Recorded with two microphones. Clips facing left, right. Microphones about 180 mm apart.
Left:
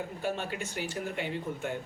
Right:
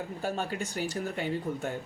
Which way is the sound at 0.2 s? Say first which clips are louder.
Right 2 dB; 40° right (ahead or behind).